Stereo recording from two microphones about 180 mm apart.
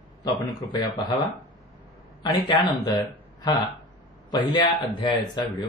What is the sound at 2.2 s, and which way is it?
A man's voice, 20° left (ahead or behind).